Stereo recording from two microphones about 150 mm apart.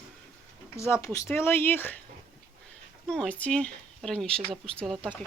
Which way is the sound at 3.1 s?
5° left (ahead or behind).